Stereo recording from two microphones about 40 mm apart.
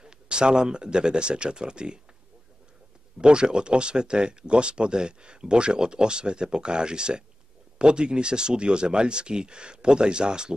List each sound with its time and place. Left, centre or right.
0.0 s speech: right
3.2 s speech: right